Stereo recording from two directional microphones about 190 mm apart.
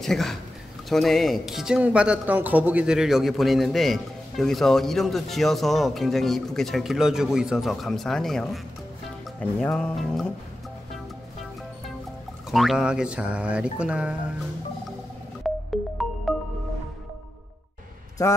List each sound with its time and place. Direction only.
0.0 s speech: centre (ahead or behind)
12.4 s speech: centre (ahead or behind)
15.5 s music: centre (ahead or behind)
18.2 s speech: 15° left (ahead or behind)